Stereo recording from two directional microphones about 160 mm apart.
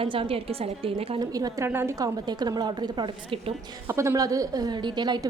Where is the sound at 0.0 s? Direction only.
35° right (ahead or behind).